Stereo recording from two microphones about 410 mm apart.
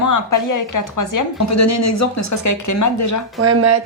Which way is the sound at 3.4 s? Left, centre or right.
Right.